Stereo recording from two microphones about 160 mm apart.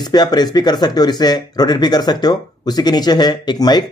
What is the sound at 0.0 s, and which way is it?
Speech, 25° left (ahead or behind).